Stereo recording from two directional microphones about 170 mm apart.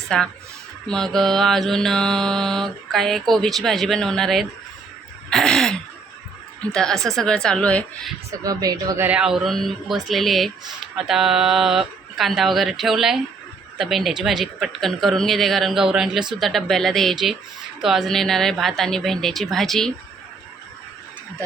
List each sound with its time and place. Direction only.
0.1 s mantra: 5° left (ahead or behind)
5.3 s throat clearing: centre (ahead or behind)
6.7 s mantra: 5° left (ahead or behind)
8.3 s a woman's voice: 20° right (ahead or behind)
9.0 s mantra: 5° right (ahead or behind)